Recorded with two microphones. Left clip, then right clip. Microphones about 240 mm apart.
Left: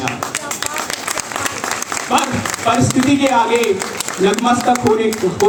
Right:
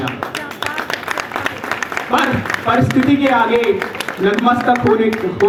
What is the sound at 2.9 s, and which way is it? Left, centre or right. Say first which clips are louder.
Speech: even; left.